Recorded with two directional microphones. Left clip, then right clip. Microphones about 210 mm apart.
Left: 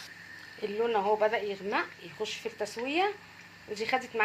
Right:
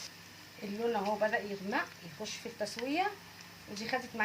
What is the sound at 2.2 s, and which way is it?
A woman's voice, 20° left (ahead or behind).